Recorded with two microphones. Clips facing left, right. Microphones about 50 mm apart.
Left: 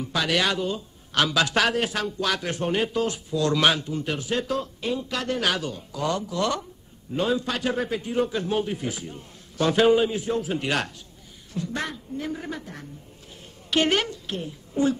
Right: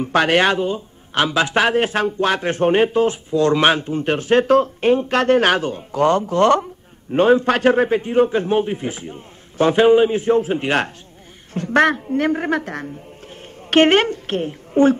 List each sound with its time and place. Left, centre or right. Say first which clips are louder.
0.0 s a man's voice: right 9 dB; right
11.5 s a woman's voice: right 14 dB; right
13.7 s a woman's voice: right 9 dB; right